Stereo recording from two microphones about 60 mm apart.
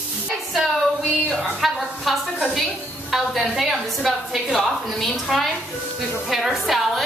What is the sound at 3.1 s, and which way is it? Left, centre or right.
A woman's voice, centre.